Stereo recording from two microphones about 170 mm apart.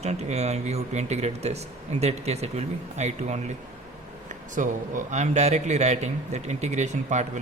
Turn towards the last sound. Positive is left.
turn(degrees=-45)  # may be behind; listen again after turning